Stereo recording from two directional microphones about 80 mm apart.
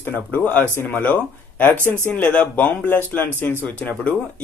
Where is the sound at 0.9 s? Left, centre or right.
Centre.